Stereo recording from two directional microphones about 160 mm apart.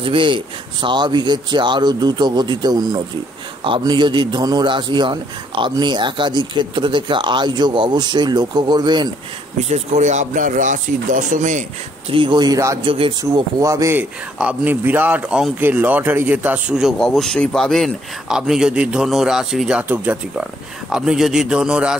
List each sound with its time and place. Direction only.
0.0 s a man's voice: 30° right (ahead or behind)
9.7 s speech: 45° right (ahead or behind)
12.1 s a man's voice: 30° right (ahead or behind)
12.8 s speech: 35° right (ahead or behind)
13.2 s a man's voice: 20° right (ahead or behind)
14.4 s a man's voice: 10° right (ahead or behind)